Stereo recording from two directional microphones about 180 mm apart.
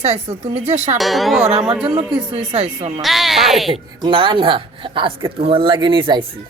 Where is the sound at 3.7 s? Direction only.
30° right (ahead or behind).